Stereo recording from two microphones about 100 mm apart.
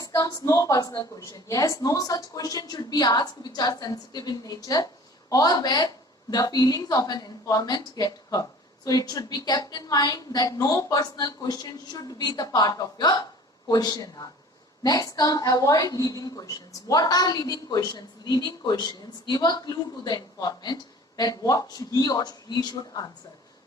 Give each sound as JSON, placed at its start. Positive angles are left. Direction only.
{"t": 0.0, "sound": "a woman's voice", "side_deg": 40}